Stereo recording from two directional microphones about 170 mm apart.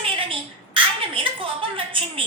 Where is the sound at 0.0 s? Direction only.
30° right (ahead or behind).